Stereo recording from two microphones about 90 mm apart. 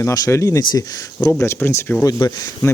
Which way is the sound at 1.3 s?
25° left (ahead or behind).